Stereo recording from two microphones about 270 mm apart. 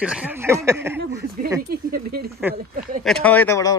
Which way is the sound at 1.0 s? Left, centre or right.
Right.